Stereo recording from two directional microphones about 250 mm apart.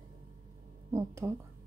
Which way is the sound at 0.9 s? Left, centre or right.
Centre.